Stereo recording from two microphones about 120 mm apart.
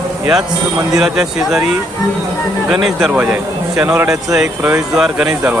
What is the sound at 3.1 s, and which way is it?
Speech, 10° right (ahead or behind).